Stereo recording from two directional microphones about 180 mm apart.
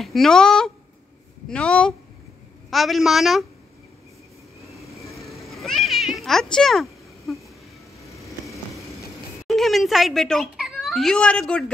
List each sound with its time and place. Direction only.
0.0 s a woman's voice: centre (ahead or behind)
5.1 s cat: centre (ahead or behind)
8.0 s vehicle: 15° left (ahead or behind)
9.5 s speech: centre (ahead or behind)